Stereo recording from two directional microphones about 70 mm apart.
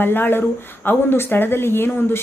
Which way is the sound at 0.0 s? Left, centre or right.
Left.